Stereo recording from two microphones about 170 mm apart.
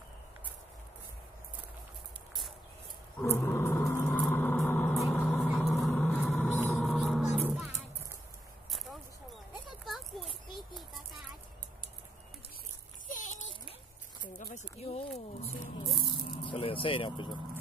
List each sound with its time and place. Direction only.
3.2 s a sound: 15° left (ahead or behind)
4.9 s vehicle: 5° left (ahead or behind)
6.5 s music: 10° left (ahead or behind)
6.9 s music: centre (ahead or behind)
9.8 s children playing: centre (ahead or behind)
13.1 s a sound: 50° left (ahead or behind)
16.0 s vehicle: 25° left (ahead or behind)